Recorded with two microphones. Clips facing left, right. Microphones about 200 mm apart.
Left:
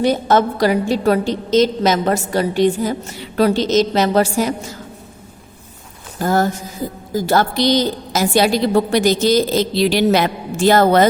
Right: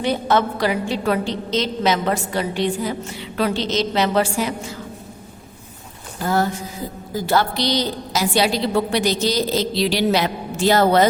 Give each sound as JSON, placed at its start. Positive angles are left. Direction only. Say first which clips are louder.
{"t": 0.0, "sound": "a woman's voice", "louder": "left 4 dB", "side_deg": 40}
{"t": 6.2, "sound": "a woman's voice", "louder": "left 3 dB", "side_deg": 45}